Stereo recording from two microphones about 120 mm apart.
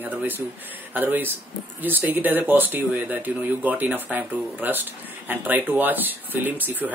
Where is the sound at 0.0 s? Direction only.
15° right (ahead or behind).